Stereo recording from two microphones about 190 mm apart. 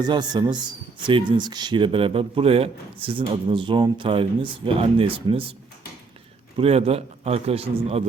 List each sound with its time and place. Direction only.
0.0 s speech: 25° right (ahead or behind)
6.6 s speech: 30° right (ahead or behind)